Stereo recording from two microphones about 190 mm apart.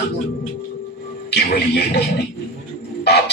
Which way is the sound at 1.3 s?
60° left (ahead or behind).